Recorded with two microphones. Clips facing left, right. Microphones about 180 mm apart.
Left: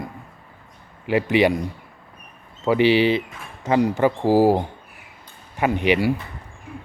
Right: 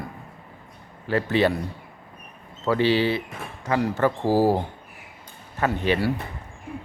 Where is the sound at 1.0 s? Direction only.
15° left (ahead or behind).